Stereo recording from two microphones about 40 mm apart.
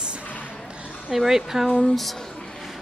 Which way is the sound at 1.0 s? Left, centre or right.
Centre.